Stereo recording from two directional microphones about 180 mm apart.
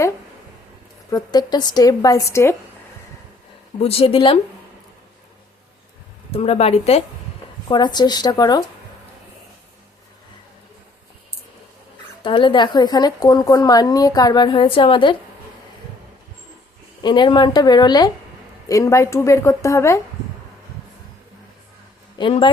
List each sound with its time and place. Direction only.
1.1 s a woman's voice: 20° left (ahead or behind)
3.8 s speech: 35° left (ahead or behind)
6.3 s speech: 35° left (ahead or behind)
7.7 s a woman's voice: 25° left (ahead or behind)
12.2 s a woman's voice: 25° left (ahead or behind)
17.0 s a woman's voice: 25° left (ahead or behind)
22.2 s a woman's voice: 30° left (ahead or behind)